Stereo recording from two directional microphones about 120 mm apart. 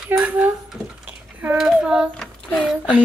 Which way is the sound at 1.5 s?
5° right (ahead or behind).